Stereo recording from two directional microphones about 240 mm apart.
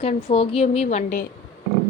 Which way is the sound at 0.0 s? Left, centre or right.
Left.